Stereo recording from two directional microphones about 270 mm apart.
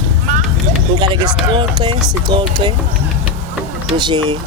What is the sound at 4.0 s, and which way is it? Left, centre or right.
Speech, centre.